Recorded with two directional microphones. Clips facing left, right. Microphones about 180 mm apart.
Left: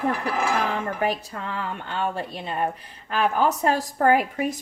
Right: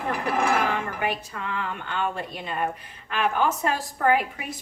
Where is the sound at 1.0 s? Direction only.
35° left (ahead or behind).